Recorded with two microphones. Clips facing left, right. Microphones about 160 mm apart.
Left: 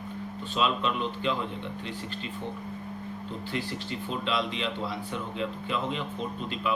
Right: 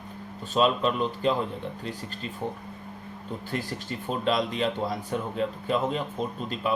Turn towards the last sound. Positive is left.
turn(degrees=-40)  # may be behind; listen again after turning